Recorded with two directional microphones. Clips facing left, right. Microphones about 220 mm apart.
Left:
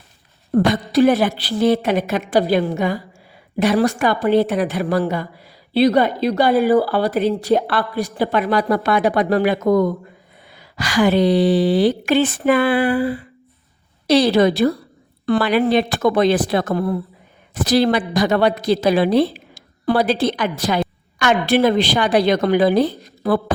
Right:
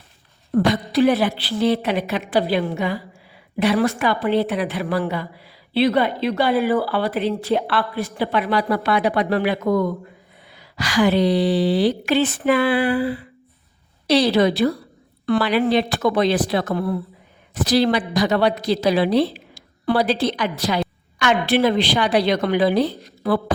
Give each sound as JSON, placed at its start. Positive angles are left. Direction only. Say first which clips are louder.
{"t": 0.5, "sound": "a woman's voice", "louder": "left 2 dB", "side_deg": 45}